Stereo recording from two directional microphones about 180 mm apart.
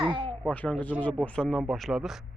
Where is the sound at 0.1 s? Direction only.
30° right (ahead or behind).